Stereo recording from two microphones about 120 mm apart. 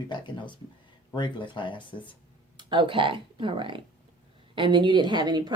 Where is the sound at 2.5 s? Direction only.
40° right (ahead or behind).